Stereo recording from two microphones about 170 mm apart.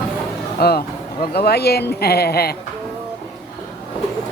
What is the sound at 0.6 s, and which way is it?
Speech, 65° left (ahead or behind).